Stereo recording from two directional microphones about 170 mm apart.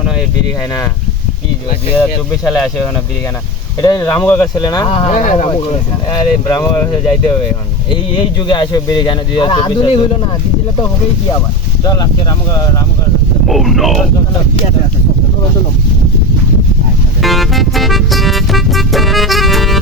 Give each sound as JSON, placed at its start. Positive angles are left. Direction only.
{"t": 2.0, "sound": "speech", "side_deg": 10}
{"t": 3.8, "sound": "speech", "side_deg": 25}
{"t": 5.5, "sound": "speech", "side_deg": 30}
{"t": 8.4, "sound": "speech", "side_deg": 25}
{"t": 11.8, "sound": "speech", "side_deg": 20}
{"t": 13.5, "sound": "speech", "side_deg": 0}
{"t": 17.2, "sound": "music", "side_deg": 0}